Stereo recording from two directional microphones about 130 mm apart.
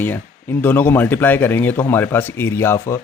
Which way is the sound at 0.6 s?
15° left (ahead or behind).